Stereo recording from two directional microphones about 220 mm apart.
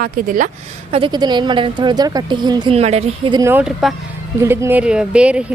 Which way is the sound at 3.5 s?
5° right (ahead or behind).